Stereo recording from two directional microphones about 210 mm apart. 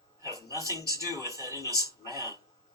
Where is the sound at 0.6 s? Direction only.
15° right (ahead or behind).